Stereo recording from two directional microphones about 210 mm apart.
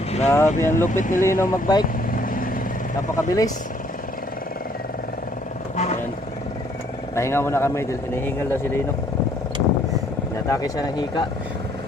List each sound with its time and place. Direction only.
0.3 s speech: 10° left (ahead or behind)
0.9 s speech: 35° left (ahead or behind)
1.2 s speech: 15° left (ahead or behind)
3.2 s speech: 15° left (ahead or behind)
5.7 s vehicle: 35° left (ahead or behind)
7.2 s speech: 10° left (ahead or behind)
10.5 s speech: 15° left (ahead or behind)